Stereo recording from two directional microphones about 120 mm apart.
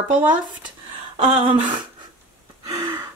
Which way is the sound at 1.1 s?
45° right (ahead or behind).